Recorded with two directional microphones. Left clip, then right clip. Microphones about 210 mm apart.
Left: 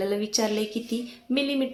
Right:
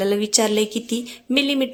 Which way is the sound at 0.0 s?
40° right (ahead or behind).